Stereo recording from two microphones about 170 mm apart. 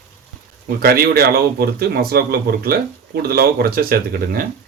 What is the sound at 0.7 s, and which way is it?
Speech, 60° right (ahead or behind).